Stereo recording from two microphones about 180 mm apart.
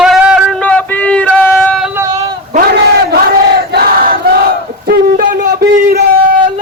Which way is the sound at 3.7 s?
55° right (ahead or behind).